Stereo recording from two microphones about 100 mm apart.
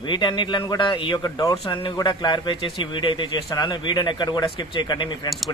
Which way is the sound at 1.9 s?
50° left (ahead or behind).